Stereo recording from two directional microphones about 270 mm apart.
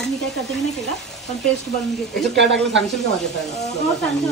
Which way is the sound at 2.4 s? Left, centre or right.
Right.